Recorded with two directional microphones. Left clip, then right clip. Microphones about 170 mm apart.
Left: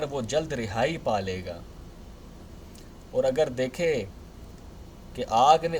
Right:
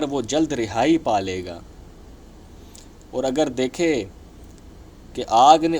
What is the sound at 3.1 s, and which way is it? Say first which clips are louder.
Speech: right 2 dB; 30° right (ahead or behind).